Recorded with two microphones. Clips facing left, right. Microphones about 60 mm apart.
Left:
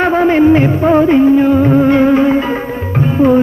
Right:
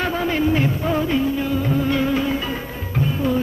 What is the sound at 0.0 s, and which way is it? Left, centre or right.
Music, left.